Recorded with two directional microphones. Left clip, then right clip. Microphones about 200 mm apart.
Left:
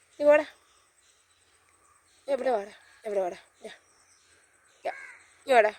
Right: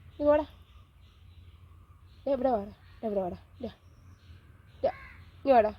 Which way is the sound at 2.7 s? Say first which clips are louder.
Left 2 dB; 20° left (ahead or behind).